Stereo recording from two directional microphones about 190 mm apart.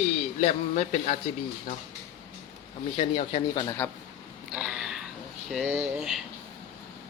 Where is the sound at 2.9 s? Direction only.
35° left (ahead or behind).